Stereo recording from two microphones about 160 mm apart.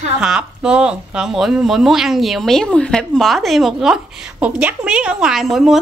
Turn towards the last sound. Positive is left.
turn(degrees=0)  # may be behind; listen again after turning